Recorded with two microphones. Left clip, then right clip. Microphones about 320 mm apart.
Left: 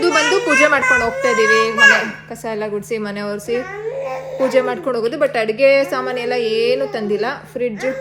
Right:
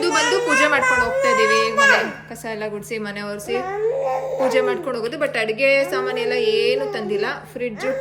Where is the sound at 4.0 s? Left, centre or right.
Right.